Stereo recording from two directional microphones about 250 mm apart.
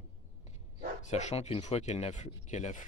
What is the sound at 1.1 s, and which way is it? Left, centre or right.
Speech, left.